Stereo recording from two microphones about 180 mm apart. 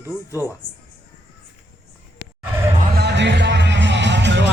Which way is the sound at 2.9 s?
70° right (ahead or behind).